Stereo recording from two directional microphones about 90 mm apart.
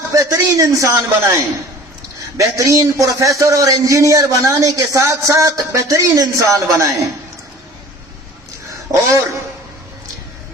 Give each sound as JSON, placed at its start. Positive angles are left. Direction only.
{"t": 0.1, "sound": "a man's voice", "side_deg": -40}
{"t": 8.9, "sound": "a man's voice", "side_deg": -35}